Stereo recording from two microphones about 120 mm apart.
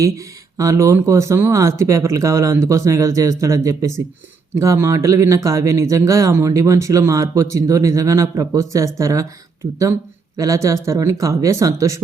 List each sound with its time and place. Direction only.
0.5 s speech: 25° right (ahead or behind)